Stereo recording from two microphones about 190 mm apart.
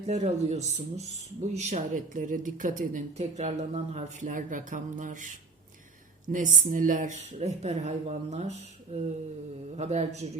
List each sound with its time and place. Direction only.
0.0 s speech: 35° right (ahead or behind)